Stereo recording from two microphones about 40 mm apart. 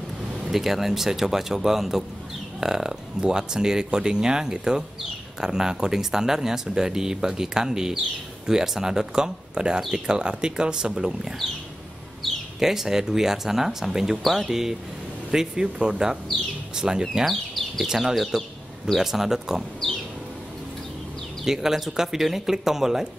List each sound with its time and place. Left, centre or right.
0.5 s speech: centre
12.5 s speech: centre
14.2 s speech: centre
14.5 s speech: centre
17.0 s speech: centre
17.3 s bird: centre
17.9 s speech: centre
21.5 s speech: centre